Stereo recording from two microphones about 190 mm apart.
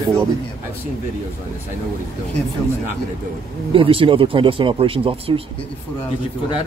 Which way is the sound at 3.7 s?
30° right (ahead or behind).